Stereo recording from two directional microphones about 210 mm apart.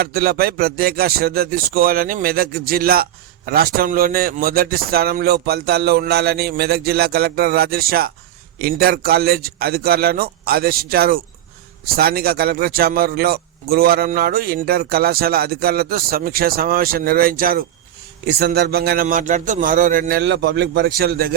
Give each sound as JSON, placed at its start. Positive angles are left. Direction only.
{"t": 0.0, "sound": "a man's voice", "side_deg": -45}